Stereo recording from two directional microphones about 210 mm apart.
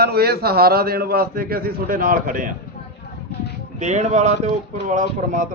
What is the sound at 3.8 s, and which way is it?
A man's voice, 35° right (ahead or behind).